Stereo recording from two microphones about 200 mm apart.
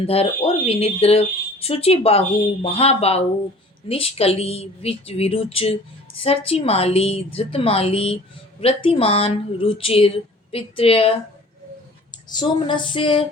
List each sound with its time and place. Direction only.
0.0 s a woman's voice: 30° left (ahead or behind)